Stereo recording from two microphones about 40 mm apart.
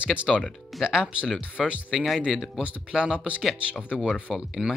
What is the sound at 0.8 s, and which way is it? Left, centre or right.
Speech, centre.